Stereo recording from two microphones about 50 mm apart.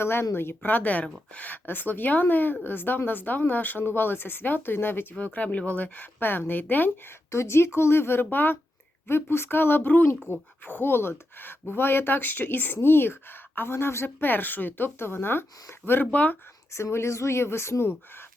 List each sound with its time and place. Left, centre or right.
0.0 s speech: left
5.2 s speech: left
6.1 s speech: left
7.3 s speech: left
10.3 s speech: left
10.7 s speech: left
16.1 s speech: left
16.7 s speech: left